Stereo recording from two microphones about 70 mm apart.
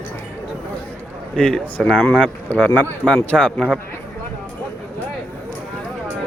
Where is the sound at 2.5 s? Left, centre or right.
Left.